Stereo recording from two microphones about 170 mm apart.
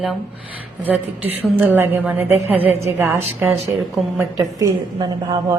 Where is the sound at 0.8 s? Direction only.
10° right (ahead or behind).